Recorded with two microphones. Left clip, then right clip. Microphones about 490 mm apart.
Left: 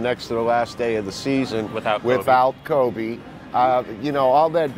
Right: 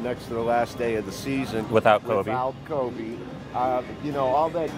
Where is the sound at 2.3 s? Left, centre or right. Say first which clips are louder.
Left 10 dB; left.